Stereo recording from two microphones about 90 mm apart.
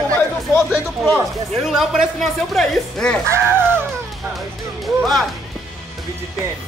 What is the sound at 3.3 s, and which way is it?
Speech, 25° right (ahead or behind).